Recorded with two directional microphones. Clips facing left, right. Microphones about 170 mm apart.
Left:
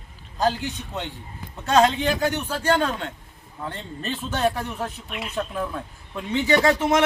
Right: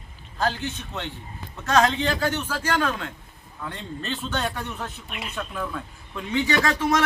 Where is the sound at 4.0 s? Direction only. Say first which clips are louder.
Left 4 dB; 10° left (ahead or behind).